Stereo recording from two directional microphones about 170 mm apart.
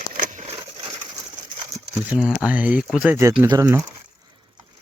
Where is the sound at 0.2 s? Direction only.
45° right (ahead or behind).